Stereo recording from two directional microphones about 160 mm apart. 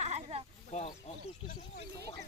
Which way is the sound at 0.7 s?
45° left (ahead or behind).